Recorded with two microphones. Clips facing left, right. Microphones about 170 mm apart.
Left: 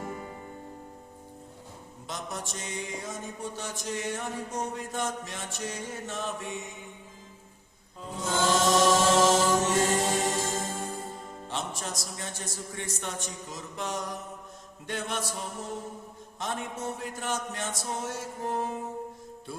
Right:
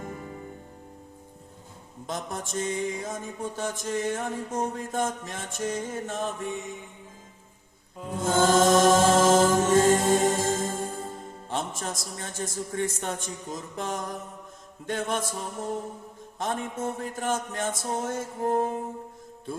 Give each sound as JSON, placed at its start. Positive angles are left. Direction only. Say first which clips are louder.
{"t": 2.0, "sound": "mantra", "louder": "right 4 dB", "side_deg": -50}
{"t": 8.1, "sound": "mantra", "louder": "right 5 dB", "side_deg": -50}
{"t": 16.4, "sound": "mantra", "louder": "right 4 dB", "side_deg": -50}